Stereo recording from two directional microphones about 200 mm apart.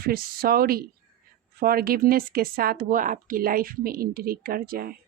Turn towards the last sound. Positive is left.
turn(degrees=-45)  # may be behind; listen again after turning